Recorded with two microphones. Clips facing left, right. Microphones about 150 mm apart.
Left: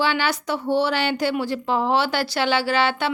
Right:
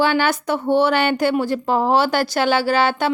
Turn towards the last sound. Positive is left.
turn(degrees=-45)  # may be behind; listen again after turning